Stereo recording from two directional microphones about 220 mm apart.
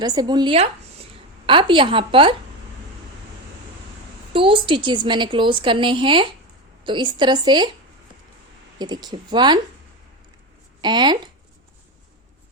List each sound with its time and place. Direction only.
0.0 s a woman's voice: 20° right (ahead or behind)
4.3 s a woman's voice: 25° right (ahead or behind)
8.8 s a woman's voice: 20° right (ahead or behind)
10.8 s speech: 20° right (ahead or behind)